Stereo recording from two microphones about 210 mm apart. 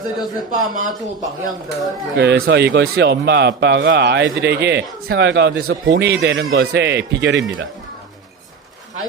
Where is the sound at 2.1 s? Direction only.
55° right (ahead or behind).